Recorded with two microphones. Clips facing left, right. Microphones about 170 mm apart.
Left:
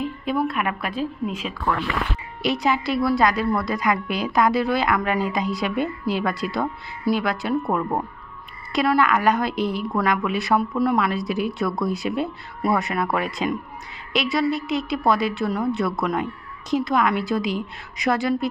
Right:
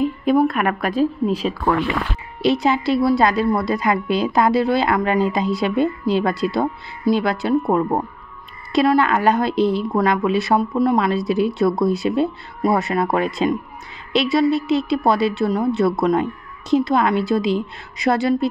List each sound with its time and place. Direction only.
0.0 s a woman's voice: 45° right (ahead or behind); by 18.5 s 30° right (ahead or behind)